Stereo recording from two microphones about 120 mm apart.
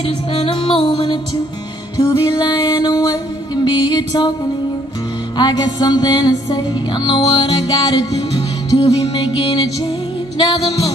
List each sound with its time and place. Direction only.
0.3 s music: 50° left (ahead or behind)
2.0 s music: 30° left (ahead or behind)
5.4 s music: 35° left (ahead or behind)